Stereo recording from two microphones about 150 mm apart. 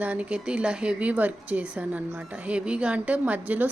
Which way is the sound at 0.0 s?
10° right (ahead or behind).